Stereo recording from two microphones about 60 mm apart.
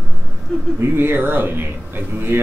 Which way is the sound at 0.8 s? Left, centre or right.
Right.